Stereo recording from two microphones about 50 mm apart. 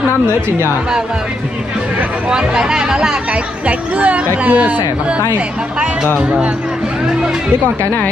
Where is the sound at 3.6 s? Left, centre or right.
Right.